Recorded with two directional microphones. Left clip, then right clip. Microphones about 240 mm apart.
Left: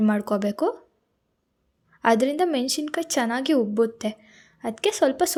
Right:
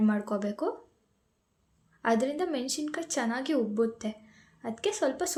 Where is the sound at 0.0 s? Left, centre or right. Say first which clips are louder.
Left 6 dB; left.